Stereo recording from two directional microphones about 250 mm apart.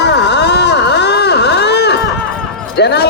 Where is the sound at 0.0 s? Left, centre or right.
Left.